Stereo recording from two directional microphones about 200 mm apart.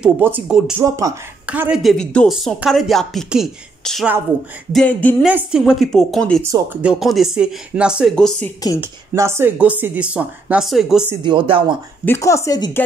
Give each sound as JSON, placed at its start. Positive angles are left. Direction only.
{"t": 0.0, "sound": "a woman's voice", "side_deg": -5}
{"t": 5.2, "sound": "a woman's voice", "side_deg": -5}
{"t": 9.1, "sound": "a woman's voice", "side_deg": -15}
{"t": 11.2, "sound": "speech", "side_deg": -25}
{"t": 12.0, "sound": "speech", "side_deg": 10}